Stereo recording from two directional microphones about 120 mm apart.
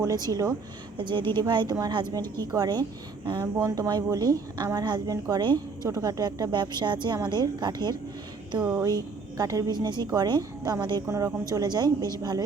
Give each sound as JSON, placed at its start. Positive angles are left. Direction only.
{"t": 0.3, "sound": "a woman's voice", "side_deg": -30}
{"t": 0.9, "sound": "a woman's voice", "side_deg": -40}
{"t": 11.0, "sound": "a woman's voice", "side_deg": -25}